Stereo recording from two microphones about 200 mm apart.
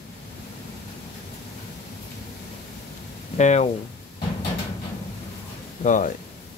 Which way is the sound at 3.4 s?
35° left (ahead or behind).